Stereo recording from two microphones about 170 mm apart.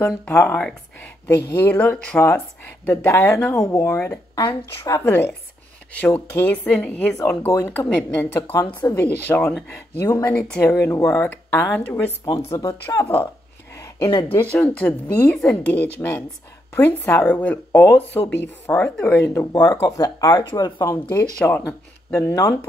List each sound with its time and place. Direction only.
0.3 s speech: 10° left (ahead or behind)
3.6 s speech: 20° left (ahead or behind)
14.3 s speech: 10° left (ahead or behind)
16.0 s speech: 15° left (ahead or behind)
21.2 s speech: 10° left (ahead or behind)